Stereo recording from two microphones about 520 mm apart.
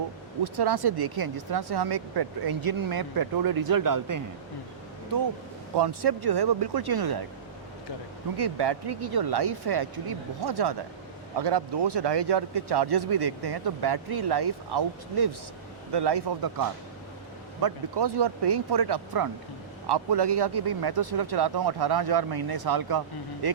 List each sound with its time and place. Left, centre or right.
0.4 s speech: right
5.7 s speech: right
8.4 s speech: right